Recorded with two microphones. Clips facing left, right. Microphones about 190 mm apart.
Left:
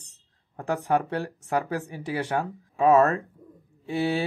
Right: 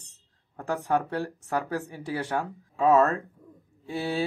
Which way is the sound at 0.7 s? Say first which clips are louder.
Left 2 dB; 15° left (ahead or behind).